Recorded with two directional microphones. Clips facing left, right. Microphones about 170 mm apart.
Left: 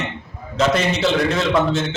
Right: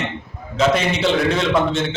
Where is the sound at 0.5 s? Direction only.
Centre (ahead or behind).